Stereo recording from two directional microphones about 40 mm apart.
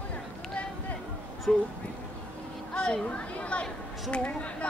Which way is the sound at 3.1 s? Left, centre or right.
Left.